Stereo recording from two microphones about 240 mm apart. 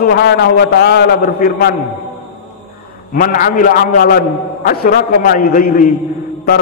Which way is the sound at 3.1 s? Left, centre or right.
Left.